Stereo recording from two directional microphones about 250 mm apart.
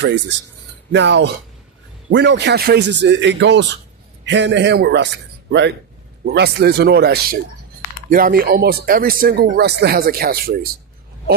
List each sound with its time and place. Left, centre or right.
0.9 s a man's voice: right